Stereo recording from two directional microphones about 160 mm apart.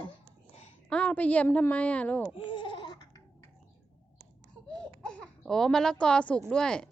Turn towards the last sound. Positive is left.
turn(degrees=5)  # may be behind; listen again after turning